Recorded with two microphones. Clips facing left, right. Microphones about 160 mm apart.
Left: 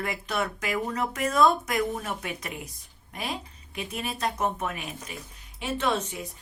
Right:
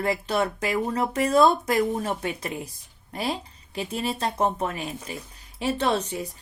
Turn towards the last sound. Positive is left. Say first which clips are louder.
# right 3 dB
turn(degrees=-35)  # may be behind; listen again after turning